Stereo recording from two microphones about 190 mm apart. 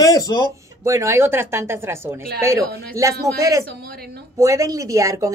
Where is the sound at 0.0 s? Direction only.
20° left (ahead or behind).